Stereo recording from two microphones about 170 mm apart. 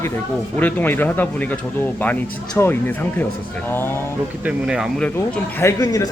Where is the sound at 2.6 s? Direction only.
10° left (ahead or behind).